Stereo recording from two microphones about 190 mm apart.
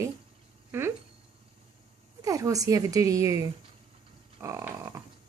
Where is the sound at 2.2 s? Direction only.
20° right (ahead or behind).